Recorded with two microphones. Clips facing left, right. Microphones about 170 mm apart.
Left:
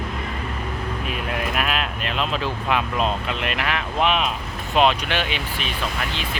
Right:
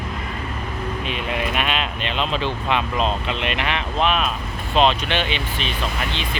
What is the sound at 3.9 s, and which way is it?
Speech, 15° left (ahead or behind).